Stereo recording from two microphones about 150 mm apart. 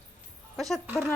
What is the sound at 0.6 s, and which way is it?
Speech, centre (ahead or behind).